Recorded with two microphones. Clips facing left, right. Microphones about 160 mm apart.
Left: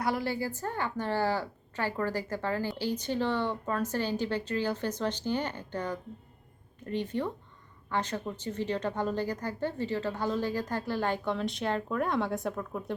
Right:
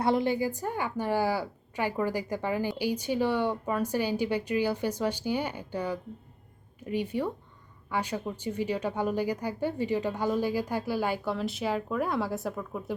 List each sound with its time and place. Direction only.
0.0 s a woman's voice: 20° right (ahead or behind); by 12.9 s 5° right (ahead or behind)